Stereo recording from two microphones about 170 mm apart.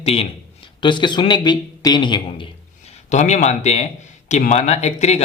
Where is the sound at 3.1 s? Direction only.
45° left (ahead or behind).